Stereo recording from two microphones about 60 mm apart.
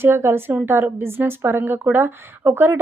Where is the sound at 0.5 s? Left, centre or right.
Right.